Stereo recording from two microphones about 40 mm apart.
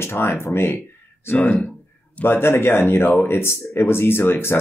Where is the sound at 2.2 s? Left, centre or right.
Left.